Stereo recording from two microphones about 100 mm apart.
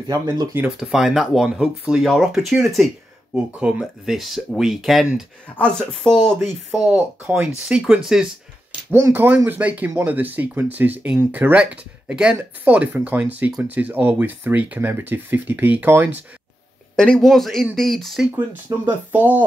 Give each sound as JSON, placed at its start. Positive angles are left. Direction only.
{"t": 0.1, "sound": "speech", "side_deg": -35}
{"t": 0.7, "sound": "speech", "side_deg": -5}
{"t": 6.7, "sound": "speech", "side_deg": -10}
{"t": 8.9, "sound": "speech", "side_deg": -20}
{"t": 16.9, "sound": "speech", "side_deg": 5}
{"t": 18.3, "sound": "speech", "side_deg": -20}